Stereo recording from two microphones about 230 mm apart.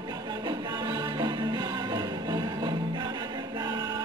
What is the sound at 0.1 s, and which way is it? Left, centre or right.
Music, centre.